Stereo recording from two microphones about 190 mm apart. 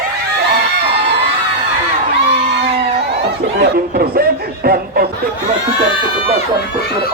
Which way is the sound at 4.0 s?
50° right (ahead or behind).